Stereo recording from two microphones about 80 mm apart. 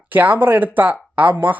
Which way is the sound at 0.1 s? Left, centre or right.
Right.